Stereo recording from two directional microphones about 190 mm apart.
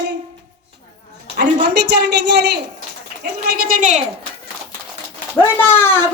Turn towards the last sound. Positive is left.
turn(degrees=10)  # may be behind; listen again after turning